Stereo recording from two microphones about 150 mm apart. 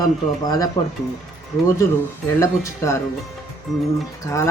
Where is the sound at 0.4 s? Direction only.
25° left (ahead or behind).